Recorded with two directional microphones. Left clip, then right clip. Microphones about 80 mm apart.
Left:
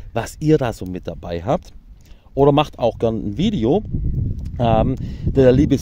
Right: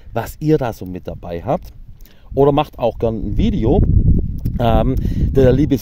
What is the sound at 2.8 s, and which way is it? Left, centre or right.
Speech, centre.